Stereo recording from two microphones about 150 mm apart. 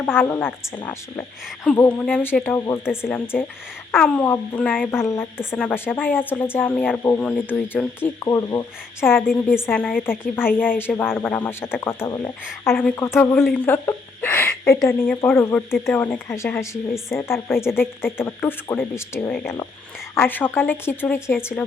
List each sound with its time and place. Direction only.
0.0 s speech: 15° left (ahead or behind)
1.6 s speech: 10° left (ahead or behind)